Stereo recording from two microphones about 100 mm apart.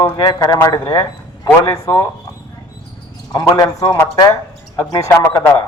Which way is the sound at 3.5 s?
40° left (ahead or behind).